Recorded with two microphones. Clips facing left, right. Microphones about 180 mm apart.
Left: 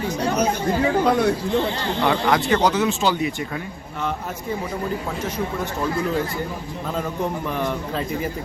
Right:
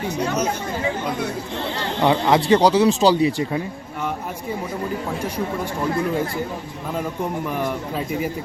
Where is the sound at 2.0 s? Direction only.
25° right (ahead or behind).